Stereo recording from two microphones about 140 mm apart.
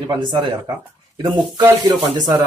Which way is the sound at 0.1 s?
30° right (ahead or behind).